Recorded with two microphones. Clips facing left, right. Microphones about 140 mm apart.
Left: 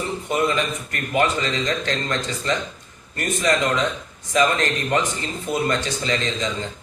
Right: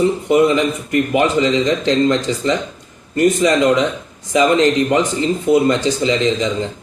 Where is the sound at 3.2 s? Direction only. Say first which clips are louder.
Right 8 dB; 20° right (ahead or behind).